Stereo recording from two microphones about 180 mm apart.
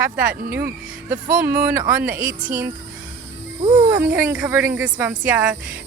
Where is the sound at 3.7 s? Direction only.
20° right (ahead or behind).